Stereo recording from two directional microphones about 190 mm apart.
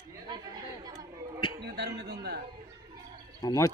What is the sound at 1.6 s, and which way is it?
Music, 60° right (ahead or behind).